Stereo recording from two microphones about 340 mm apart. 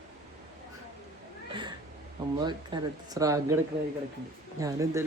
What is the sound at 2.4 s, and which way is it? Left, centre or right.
Speech, centre.